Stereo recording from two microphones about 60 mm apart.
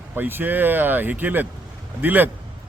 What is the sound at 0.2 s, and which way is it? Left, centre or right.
A man's voice, right.